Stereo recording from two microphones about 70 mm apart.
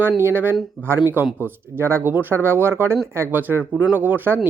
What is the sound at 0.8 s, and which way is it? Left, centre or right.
Speech, centre.